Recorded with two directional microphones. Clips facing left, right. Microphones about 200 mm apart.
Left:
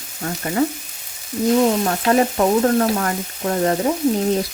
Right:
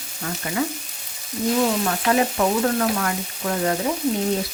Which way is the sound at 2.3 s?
35° left (ahead or behind).